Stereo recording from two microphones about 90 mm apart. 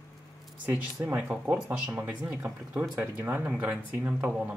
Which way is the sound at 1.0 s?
20° right (ahead or behind).